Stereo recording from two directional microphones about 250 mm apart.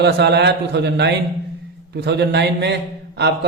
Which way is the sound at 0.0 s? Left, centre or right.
Right.